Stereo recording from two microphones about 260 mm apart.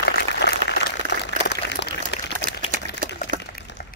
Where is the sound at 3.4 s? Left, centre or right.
Left.